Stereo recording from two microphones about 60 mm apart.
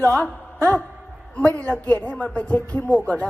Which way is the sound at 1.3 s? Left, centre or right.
Left.